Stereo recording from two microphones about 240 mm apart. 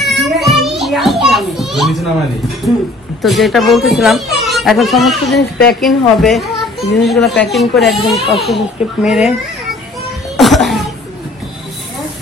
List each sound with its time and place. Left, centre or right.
0.0 s children playing: centre
3.2 s a child's voice: centre
5.4 s speech: left
5.8 s a child's voice: centre
10.3 s cough: centre